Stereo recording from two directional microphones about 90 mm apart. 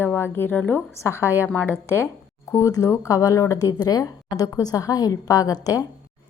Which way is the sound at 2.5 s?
35° left (ahead or behind).